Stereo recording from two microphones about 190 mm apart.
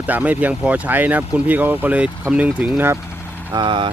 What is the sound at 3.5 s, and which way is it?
Speech, 25° right (ahead or behind).